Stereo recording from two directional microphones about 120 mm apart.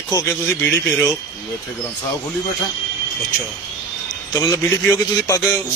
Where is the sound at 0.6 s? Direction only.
5° left (ahead or behind).